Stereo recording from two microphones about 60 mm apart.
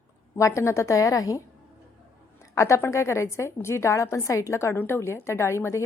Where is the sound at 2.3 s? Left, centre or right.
Left.